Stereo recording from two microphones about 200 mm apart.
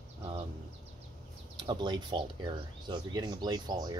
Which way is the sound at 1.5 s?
20° right (ahead or behind).